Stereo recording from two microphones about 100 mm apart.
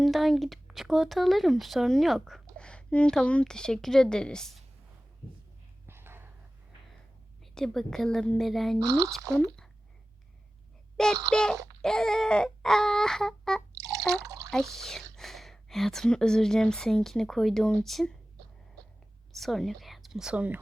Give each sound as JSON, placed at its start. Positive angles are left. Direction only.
{"t": 0.0, "sound": "speech", "side_deg": 0}
{"t": 5.8, "sound": "a sound", "side_deg": -25}
{"t": 7.5, "sound": "speech", "side_deg": 5}
{"t": 8.8, "sound": "speech", "side_deg": -35}
{"t": 10.9, "sound": "a child's voice", "side_deg": 5}
{"t": 14.1, "sound": "drip", "side_deg": -35}
{"t": 14.5, "sound": "speech", "side_deg": 5}
{"t": 19.3, "sound": "a woman's voice", "side_deg": 0}